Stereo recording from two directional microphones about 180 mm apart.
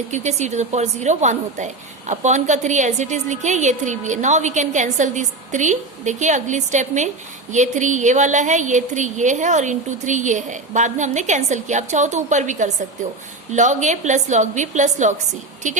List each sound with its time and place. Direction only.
0.1 s a woman's voice: 40° right (ahead or behind)